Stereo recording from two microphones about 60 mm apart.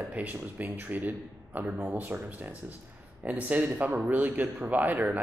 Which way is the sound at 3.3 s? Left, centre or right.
Right.